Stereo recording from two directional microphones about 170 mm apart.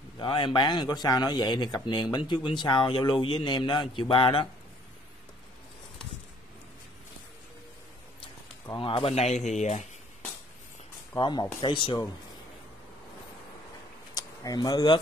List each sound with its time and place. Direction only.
0.2 s speech: 30° left (ahead or behind)
8.7 s speech: 30° left (ahead or behind)
11.1 s speech: 25° left (ahead or behind)
14.1 s speech: 20° left (ahead or behind)